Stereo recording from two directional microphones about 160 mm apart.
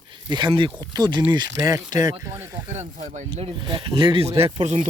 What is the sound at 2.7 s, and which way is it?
Speech, 45° right (ahead or behind).